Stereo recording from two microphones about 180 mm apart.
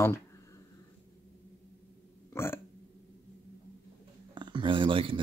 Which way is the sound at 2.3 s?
15° left (ahead or behind).